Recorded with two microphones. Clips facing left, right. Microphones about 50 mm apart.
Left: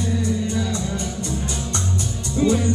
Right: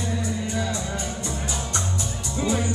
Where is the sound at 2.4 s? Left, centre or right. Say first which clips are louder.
Left 6 dB; centre.